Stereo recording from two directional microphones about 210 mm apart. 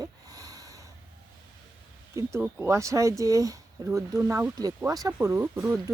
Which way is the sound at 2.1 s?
10° right (ahead or behind).